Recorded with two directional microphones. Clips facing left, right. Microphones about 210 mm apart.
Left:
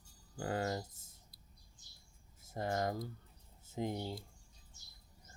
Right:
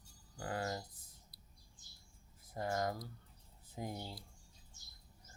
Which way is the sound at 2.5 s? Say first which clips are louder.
Left 2 dB; 30° left (ahead or behind).